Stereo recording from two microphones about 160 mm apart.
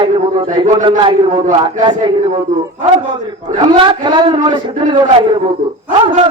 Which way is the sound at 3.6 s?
30° right (ahead or behind).